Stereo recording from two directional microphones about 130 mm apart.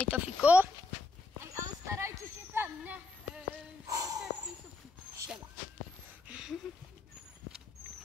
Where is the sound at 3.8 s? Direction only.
25° right (ahead or behind).